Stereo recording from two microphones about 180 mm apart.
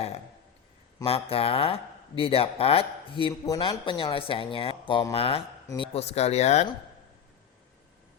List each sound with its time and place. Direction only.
1.0 s speech: 30° left (ahead or behind)